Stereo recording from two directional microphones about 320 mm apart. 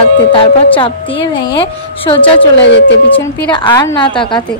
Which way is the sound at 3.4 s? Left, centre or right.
Centre.